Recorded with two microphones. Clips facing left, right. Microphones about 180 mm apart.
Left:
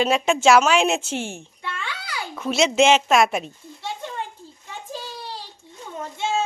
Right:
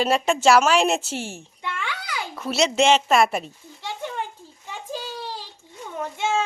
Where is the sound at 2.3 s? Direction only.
Centre (ahead or behind).